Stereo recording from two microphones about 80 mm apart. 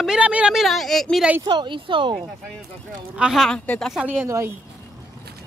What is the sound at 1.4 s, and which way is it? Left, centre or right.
Speech, right.